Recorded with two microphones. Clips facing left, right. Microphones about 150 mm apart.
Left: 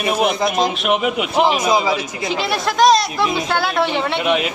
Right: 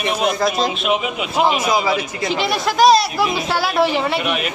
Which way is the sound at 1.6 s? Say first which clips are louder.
Left 1 dB; 25° left (ahead or behind).